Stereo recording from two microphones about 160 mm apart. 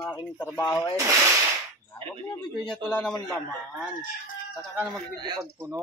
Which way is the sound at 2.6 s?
5° left (ahead or behind).